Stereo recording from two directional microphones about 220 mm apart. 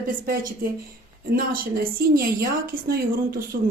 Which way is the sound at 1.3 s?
40° right (ahead or behind).